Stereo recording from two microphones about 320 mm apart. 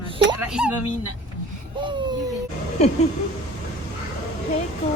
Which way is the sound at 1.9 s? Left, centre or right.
Centre.